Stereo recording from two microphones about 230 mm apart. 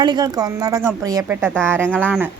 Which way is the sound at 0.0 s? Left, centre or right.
Centre.